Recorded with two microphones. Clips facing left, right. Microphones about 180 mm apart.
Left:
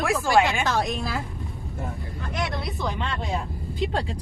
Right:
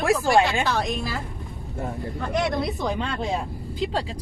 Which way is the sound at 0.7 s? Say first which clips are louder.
Even; centre (ahead or behind).